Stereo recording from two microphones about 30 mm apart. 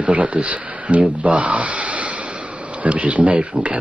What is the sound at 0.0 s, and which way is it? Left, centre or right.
Speech, right.